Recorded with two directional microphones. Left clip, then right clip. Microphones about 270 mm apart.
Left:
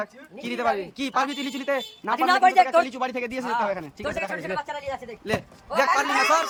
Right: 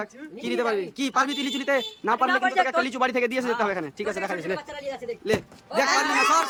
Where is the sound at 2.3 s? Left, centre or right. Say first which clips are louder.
Left 9 dB; left.